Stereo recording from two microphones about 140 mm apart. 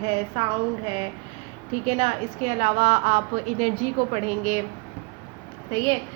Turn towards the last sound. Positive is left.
turn(degrees=-40)  # may be behind; listen again after turning